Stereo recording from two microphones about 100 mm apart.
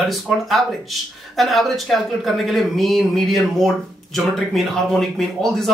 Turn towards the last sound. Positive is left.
turn(degrees=0)  # may be behind; listen again after turning